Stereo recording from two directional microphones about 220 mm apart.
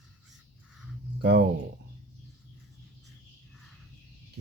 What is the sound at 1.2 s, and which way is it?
Speech, 50° right (ahead or behind).